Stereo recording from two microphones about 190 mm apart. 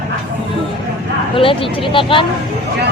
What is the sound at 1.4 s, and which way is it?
Speech, 30° left (ahead or behind).